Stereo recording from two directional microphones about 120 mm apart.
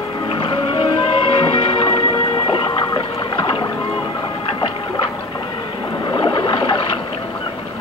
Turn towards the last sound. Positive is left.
turn(degrees=45)  # may be behind; listen again after turning